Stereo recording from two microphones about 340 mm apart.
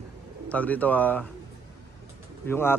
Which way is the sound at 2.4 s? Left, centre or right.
Centre.